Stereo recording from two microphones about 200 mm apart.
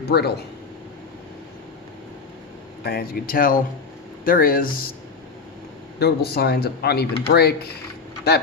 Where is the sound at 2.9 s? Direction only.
50° left (ahead or behind).